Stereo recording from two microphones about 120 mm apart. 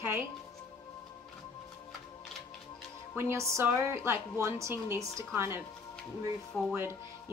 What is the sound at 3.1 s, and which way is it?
A woman's voice, 20° right (ahead or behind).